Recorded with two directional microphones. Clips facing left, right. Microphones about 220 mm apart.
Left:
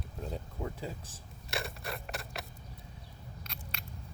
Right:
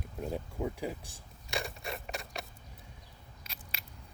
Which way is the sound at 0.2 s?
15° right (ahead or behind).